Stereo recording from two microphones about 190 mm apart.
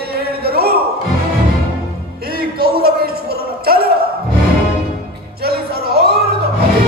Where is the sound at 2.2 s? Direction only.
55° right (ahead or behind).